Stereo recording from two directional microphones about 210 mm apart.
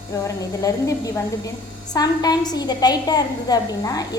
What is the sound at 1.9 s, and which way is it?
A woman's voice, 20° left (ahead or behind).